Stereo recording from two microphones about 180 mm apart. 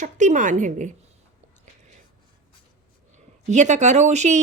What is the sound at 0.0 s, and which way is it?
Speech, 45° right (ahead or behind).